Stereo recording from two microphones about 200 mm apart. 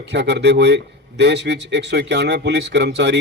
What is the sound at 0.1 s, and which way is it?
A man's voice, 60° right (ahead or behind).